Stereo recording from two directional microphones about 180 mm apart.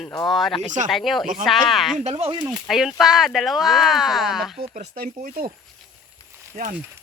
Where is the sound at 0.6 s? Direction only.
45° right (ahead or behind).